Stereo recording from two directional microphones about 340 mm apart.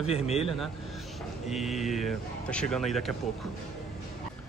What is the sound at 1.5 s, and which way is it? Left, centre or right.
Speech, centre.